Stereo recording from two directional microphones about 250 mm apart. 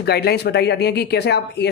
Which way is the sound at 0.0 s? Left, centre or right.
Left.